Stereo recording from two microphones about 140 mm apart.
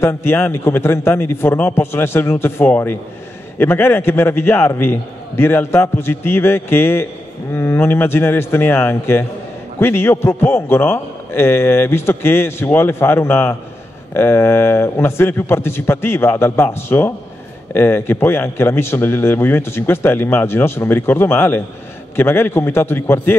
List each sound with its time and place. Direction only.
0.0 s a man's voice: 15° left (ahead or behind)